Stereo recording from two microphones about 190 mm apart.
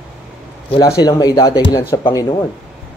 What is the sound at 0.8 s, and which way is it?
Speech, 20° left (ahead or behind).